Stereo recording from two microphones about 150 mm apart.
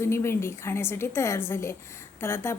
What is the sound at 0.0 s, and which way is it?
A woman's voice, 15° left (ahead or behind).